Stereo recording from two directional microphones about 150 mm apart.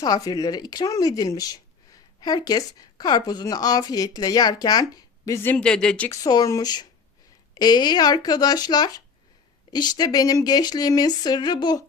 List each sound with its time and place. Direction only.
0.0 s speech: 25° left (ahead or behind); by 6.1 s 5° left (ahead or behind)
6.1 s speech: 25° left (ahead or behind)